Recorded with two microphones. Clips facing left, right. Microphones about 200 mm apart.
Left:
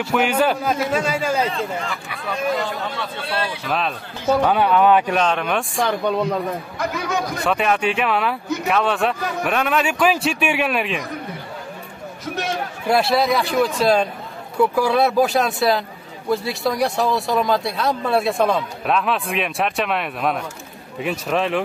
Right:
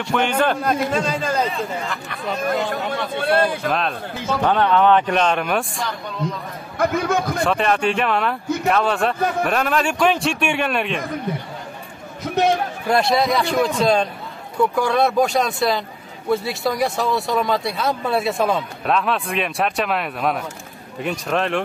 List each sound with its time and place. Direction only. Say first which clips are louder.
0.0 s a man's voice: left 1 dB; 5° left (ahead or behind)
3.2 s a man's voice: right 9 dB; 50° right (ahead or behind)
3.6 s a man's voice: right 2 dB; centre (ahead or behind)
5.8 s a man's voice: left 8 dB; 65° left (ahead or behind)
6.8 s a man's voice: right 6 dB; 50° right (ahead or behind)
7.4 s speech: left 1 dB; 5° left (ahead or behind)
12.8 s speech: left 1 dB; 5° left (ahead or behind)